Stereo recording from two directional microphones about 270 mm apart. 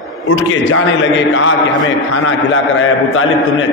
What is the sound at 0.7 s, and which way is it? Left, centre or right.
Speech, left.